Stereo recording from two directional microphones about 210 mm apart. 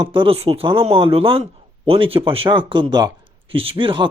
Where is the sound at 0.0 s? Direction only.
25° right (ahead or behind).